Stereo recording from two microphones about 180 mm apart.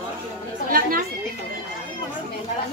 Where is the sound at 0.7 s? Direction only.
55° right (ahead or behind).